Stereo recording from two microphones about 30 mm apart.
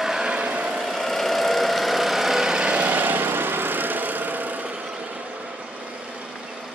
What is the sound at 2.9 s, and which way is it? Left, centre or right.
Vehicle, right.